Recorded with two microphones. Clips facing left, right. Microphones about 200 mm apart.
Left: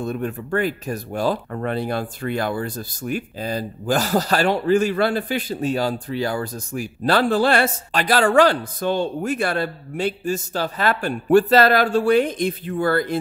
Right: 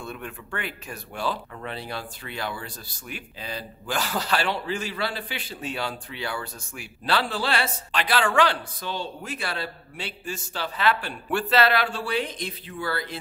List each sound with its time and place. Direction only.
0.0 s speech: 40° left (ahead or behind)